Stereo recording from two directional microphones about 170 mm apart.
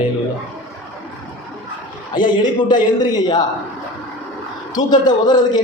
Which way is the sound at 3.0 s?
25° left (ahead or behind).